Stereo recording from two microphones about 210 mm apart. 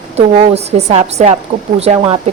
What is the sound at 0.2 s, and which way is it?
A woman's voice, 30° right (ahead or behind).